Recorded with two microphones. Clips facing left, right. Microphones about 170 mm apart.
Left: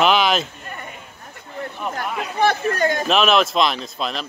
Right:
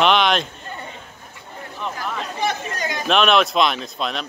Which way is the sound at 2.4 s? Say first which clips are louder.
Left 8 dB; 55° left (ahead or behind).